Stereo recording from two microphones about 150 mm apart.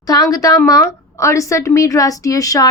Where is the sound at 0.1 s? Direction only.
25° left (ahead or behind).